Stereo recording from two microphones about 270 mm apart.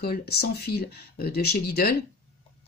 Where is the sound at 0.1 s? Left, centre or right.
Left.